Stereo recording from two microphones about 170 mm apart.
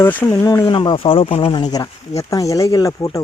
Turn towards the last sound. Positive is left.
turn(degrees=20)  # may be behind; listen again after turning